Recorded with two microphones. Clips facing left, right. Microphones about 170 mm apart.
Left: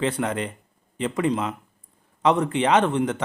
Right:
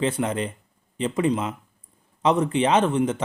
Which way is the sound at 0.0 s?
20° right (ahead or behind).